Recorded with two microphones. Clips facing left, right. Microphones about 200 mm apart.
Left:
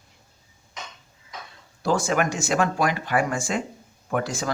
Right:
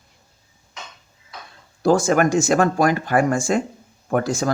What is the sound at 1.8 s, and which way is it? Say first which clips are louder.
Speech: right 6 dB; 45° right (ahead or behind).